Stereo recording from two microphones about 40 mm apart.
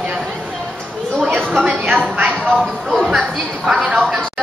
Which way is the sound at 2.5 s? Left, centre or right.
Centre.